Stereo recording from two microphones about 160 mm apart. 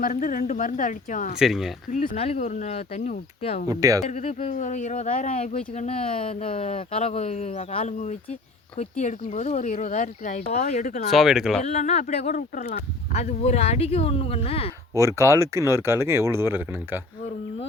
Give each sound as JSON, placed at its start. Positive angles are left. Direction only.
{"t": 0.0, "sound": "speech", "side_deg": 55}
{"t": 1.4, "sound": "speech", "side_deg": 0}
{"t": 1.9, "sound": "speech", "side_deg": 55}
{"t": 2.1, "sound": "speech", "side_deg": 40}
{"t": 3.7, "sound": "speech", "side_deg": -20}
{"t": 4.0, "sound": "speech", "side_deg": 45}
{"t": 11.1, "sound": "speech", "side_deg": 0}
{"t": 11.6, "sound": "speech", "side_deg": 45}
{"t": 13.1, "sound": "speech", "side_deg": 45}
{"t": 14.9, "sound": "speech", "side_deg": -20}